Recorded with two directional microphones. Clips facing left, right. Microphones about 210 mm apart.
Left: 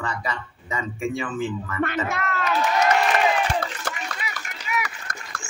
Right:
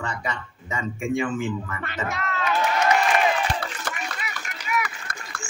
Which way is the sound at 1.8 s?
55° left (ahead or behind).